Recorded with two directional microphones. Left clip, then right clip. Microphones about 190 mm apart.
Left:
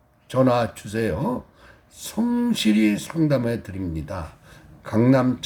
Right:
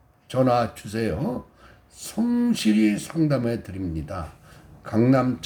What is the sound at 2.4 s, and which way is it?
Speech, 20° left (ahead or behind).